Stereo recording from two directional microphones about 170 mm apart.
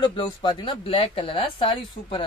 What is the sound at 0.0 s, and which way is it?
Speech, 30° left (ahead or behind).